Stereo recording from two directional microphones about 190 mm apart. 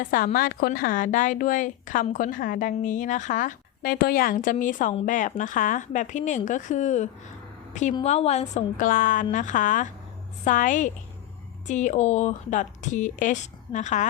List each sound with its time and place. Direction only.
0.0 s a woman's voice: 45° left (ahead or behind)